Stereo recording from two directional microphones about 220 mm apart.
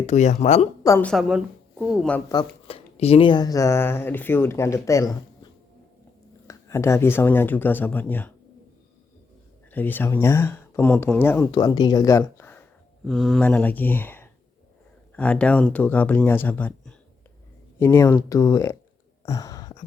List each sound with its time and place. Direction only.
0.0 s speech: 30° left (ahead or behind)
0.9 s a woman's voice: 10° left (ahead or behind)
2.6 s speech: 25° left (ahead or behind)
6.5 s speech: 15° left (ahead or behind)
9.7 s speech: 10° left (ahead or behind)
19.2 s a sound: 15° left (ahead or behind)